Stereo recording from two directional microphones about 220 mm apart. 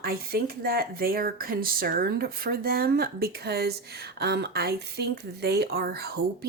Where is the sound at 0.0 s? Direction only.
45° right (ahead or behind).